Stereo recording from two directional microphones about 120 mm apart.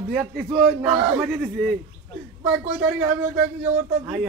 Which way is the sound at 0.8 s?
15° right (ahead or behind).